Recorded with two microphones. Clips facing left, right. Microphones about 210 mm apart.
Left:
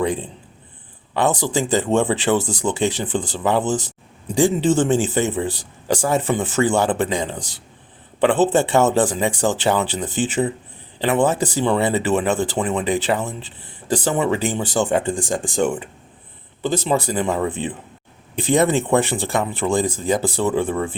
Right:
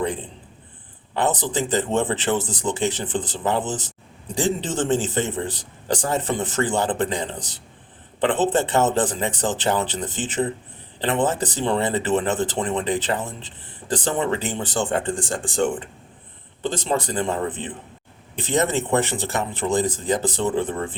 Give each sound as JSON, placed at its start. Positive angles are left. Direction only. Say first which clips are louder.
{"t": 1.3, "sound": "speech", "louder": "left 4 dB", "side_deg": 10}